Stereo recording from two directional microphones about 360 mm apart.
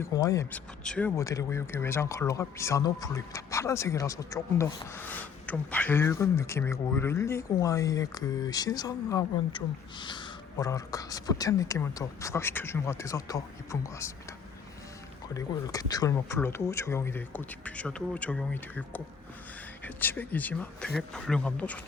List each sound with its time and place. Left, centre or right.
0.0 s speech: centre
15.3 s speech: centre